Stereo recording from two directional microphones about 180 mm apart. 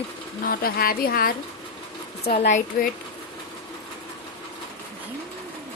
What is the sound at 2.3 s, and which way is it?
Speech, 40° left (ahead or behind).